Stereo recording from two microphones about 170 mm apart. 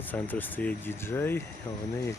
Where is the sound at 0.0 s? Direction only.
10° left (ahead or behind).